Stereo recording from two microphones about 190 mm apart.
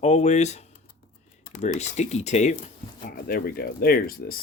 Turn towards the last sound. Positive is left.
turn(degrees=50)  # may be behind; listen again after turning